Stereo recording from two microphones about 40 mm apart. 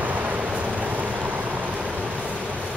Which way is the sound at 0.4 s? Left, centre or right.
Right.